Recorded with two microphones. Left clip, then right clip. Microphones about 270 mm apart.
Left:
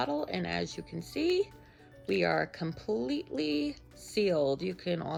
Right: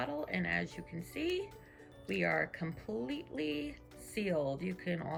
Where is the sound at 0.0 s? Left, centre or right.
Centre.